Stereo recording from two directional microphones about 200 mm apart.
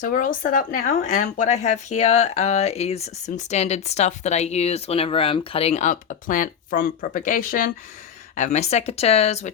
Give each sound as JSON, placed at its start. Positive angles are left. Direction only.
{"t": 0.0, "sound": "speech", "side_deg": 45}